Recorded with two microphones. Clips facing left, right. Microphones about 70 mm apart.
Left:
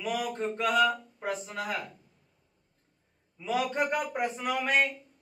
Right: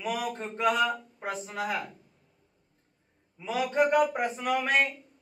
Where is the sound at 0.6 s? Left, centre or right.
Centre.